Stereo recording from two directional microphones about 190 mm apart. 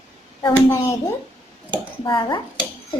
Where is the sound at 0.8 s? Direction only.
15° left (ahead or behind).